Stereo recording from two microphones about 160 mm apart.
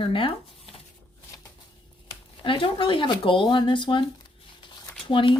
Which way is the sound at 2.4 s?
35° left (ahead or behind).